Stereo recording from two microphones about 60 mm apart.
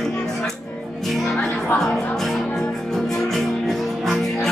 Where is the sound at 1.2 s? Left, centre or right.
Centre.